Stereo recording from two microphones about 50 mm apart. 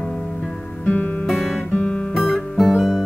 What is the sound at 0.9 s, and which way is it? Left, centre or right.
Music, left.